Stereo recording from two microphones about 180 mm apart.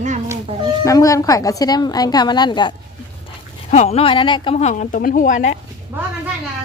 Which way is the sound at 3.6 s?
40° left (ahead or behind).